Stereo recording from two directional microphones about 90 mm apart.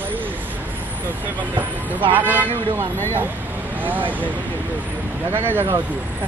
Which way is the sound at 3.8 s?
20° right (ahead or behind).